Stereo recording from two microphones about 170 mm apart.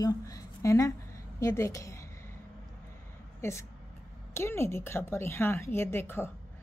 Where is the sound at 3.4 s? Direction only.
15° left (ahead or behind).